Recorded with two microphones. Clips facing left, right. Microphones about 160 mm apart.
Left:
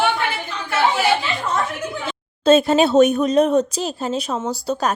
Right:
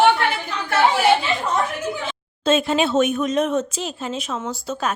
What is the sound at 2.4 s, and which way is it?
A woman's voice, 40° left (ahead or behind).